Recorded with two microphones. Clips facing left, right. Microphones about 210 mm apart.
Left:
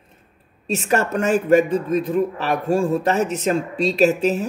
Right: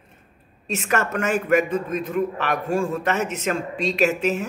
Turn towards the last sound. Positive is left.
turn(degrees=35)  # may be behind; listen again after turning